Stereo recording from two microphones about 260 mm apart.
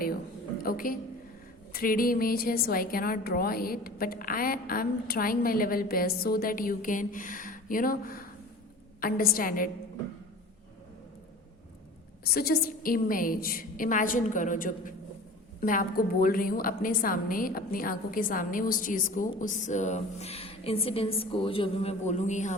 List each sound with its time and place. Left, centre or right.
0.6 s a woman's voice: left
12.2 s a woman's voice: left